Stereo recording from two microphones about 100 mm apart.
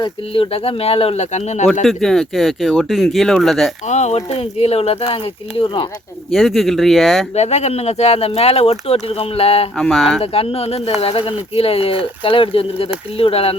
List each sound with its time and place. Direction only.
0.0 s speech: 65° left (ahead or behind); by 1.5 s 90° left
1.6 s speech: centre (ahead or behind)
4.1 s speech: 90° left; by 5.9 s 55° left (ahead or behind)
6.3 s speech: centre (ahead or behind)
7.3 s speech: 90° left
9.7 s speech: 5° left (ahead or behind)
10.2 s speech: 80° left
11.0 s speech: 75° left (ahead or behind)